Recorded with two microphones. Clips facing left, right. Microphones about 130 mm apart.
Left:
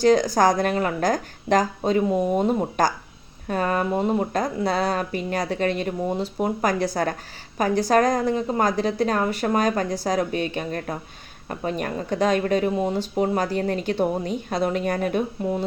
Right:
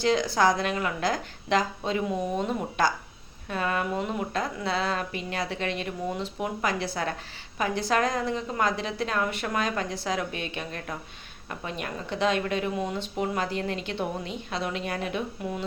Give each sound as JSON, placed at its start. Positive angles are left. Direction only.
{"t": 0.0, "sound": "a woman's voice", "side_deg": 40}
{"t": 15.4, "sound": "speech", "side_deg": 35}